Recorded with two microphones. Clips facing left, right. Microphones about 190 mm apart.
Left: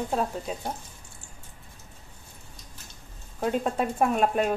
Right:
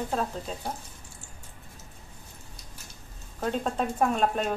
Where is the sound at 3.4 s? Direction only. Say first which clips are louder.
Left 2 dB; 5° left (ahead or behind).